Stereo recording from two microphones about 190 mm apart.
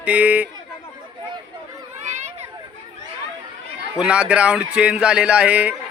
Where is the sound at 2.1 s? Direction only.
40° right (ahead or behind).